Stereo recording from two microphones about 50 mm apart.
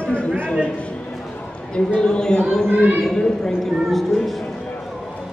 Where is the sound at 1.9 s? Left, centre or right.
Centre.